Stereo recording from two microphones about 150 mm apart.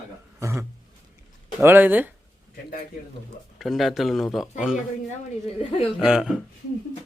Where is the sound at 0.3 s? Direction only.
20° right (ahead or behind).